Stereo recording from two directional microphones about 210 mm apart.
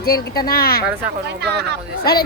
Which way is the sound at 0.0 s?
45° left (ahead or behind).